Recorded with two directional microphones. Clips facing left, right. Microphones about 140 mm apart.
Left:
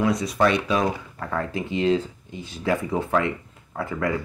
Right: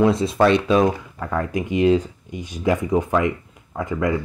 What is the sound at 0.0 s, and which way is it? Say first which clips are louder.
Speech: right 4 dB; 25° right (ahead or behind).